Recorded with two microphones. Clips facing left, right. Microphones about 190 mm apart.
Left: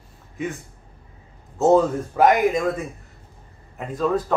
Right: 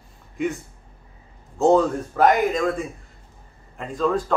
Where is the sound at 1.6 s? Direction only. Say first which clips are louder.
Left 1 dB; 5° left (ahead or behind).